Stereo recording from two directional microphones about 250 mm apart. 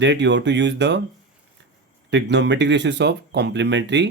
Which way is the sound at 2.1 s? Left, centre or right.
Right.